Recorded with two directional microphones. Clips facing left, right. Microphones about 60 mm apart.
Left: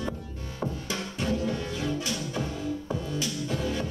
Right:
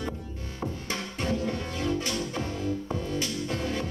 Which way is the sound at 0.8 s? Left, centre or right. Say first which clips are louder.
Even; right.